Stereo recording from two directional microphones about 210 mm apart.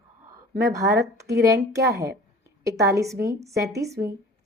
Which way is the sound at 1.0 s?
15° right (ahead or behind).